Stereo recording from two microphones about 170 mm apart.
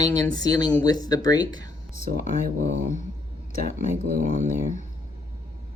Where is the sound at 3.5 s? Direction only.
40° left (ahead or behind).